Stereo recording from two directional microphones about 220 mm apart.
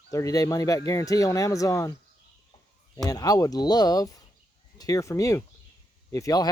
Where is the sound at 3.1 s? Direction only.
15° left (ahead or behind).